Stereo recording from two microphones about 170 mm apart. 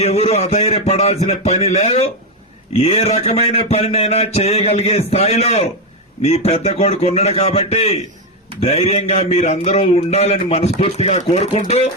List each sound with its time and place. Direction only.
0.0 s speech: 35° left (ahead or behind)